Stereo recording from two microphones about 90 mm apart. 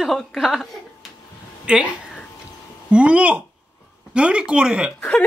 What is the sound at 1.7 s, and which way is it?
Speech, 10° right (ahead or behind).